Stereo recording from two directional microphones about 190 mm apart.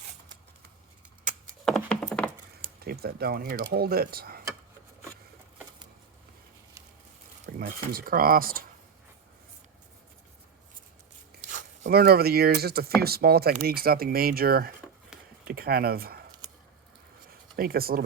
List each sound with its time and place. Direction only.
1.6 s a sound: 5° left (ahead or behind)
2.8 s speech: 55° right (ahead or behind)
7.4 s speech: 50° right (ahead or behind)
11.5 s speech: 50° right (ahead or behind)
15.1 s typing: 5° right (ahead or behind)
15.4 s speech: 55° right (ahead or behind)
17.6 s speech: 50° right (ahead or behind)